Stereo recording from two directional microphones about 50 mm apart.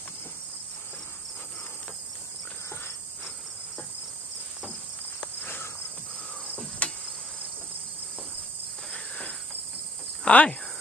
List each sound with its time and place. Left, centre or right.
5.2 s insect: left
6.8 s cricket: left
8.9 s insect: centre